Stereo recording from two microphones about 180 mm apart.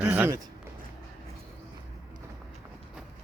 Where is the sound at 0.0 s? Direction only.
10° right (ahead or behind).